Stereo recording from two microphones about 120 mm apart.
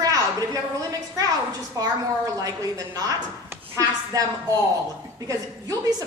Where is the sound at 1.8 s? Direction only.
30° right (ahead or behind).